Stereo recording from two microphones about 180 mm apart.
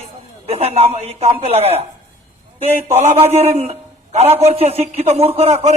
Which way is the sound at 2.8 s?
35° right (ahead or behind).